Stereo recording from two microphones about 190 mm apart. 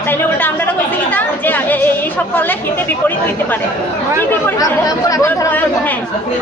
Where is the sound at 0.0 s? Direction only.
10° left (ahead or behind).